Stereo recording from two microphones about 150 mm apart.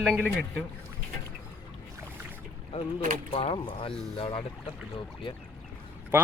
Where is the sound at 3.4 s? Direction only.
35° left (ahead or behind).